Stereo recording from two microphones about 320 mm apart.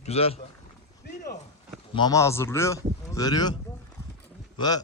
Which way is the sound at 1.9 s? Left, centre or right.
Centre.